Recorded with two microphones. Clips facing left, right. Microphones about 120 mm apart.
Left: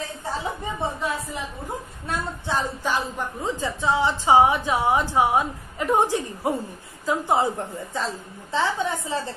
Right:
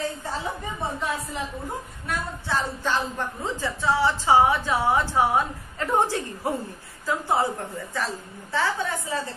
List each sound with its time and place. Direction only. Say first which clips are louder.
2.0 s a woman's voice: left 2 dB; 25° left (ahead or behind)